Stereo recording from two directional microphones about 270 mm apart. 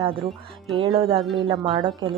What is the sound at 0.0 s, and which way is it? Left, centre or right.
A woman's voice, centre.